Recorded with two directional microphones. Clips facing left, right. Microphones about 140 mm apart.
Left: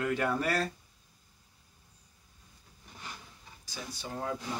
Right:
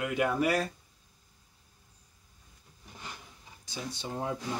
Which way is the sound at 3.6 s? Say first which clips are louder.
Right 3 dB; 25° right (ahead or behind).